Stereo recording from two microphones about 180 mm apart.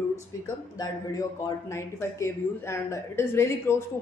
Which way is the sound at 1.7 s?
15° left (ahead or behind).